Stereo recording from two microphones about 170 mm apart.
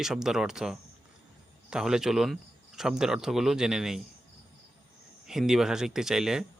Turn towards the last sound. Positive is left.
turn(degrees=-5)  # may be behind; listen again after turning